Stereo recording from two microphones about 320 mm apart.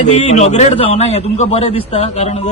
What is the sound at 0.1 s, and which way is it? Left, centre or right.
A man's voice, left.